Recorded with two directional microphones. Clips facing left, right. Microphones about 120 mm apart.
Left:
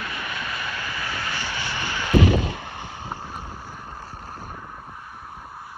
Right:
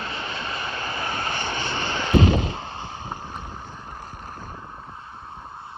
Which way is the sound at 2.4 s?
25° right (ahead or behind).